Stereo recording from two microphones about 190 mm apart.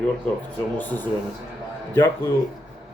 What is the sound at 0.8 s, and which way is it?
Speech, 10° left (ahead or behind).